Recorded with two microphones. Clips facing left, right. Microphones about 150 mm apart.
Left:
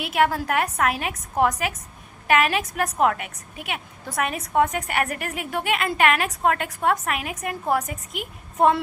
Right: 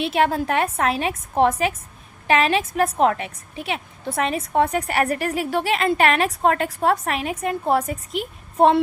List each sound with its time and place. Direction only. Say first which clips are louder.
0.0 s a woman's voice: right 2 dB; 25° right (ahead or behind)